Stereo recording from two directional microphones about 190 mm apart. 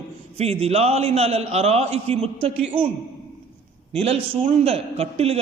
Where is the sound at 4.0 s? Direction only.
30° right (ahead or behind).